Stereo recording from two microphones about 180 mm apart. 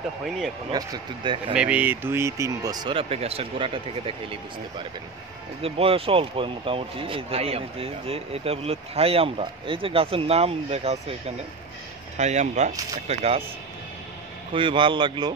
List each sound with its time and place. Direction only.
0.7 s speech: 25° right (ahead or behind)
1.5 s speech: 5° right (ahead or behind); by 13.4 s 35° right (ahead or behind)
14.5 s speech: 30° right (ahead or behind)